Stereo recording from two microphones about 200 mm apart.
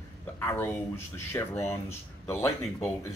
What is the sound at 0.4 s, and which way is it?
Speech, 10° left (ahead or behind).